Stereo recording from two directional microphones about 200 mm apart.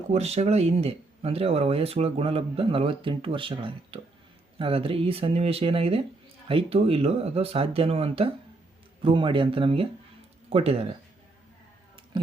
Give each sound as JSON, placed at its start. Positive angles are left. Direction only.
{"t": 0.1, "sound": "speech", "side_deg": -35}